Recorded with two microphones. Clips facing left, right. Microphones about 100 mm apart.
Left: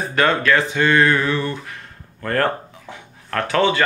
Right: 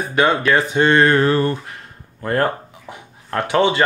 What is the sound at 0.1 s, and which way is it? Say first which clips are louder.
Speech: right 1 dB; 15° right (ahead or behind).